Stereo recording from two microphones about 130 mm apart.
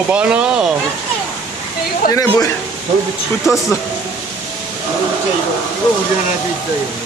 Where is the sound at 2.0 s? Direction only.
90° left.